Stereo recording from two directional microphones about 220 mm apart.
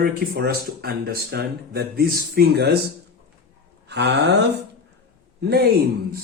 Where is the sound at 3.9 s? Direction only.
50° right (ahead or behind).